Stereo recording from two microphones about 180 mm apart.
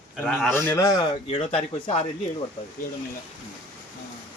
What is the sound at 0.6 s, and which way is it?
Speech, 15° left (ahead or behind).